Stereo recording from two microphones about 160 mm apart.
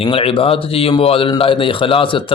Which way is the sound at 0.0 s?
35° left (ahead or behind).